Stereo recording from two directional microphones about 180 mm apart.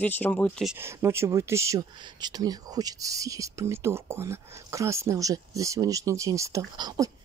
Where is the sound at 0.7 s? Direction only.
15° right (ahead or behind).